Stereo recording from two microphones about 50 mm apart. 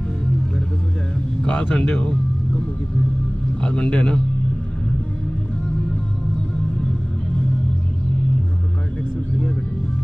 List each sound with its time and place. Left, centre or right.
1.4 s speech: centre
3.6 s a man's voice: centre